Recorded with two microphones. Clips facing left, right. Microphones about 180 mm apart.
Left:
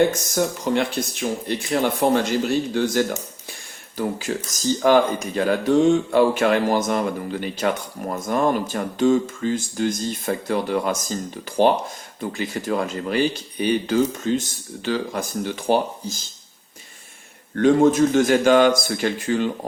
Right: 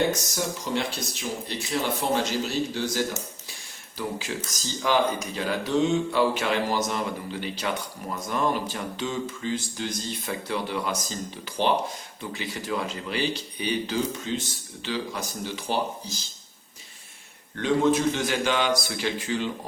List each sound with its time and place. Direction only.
0.3 s speech: 55° left (ahead or behind)
17.6 s speech: 45° left (ahead or behind)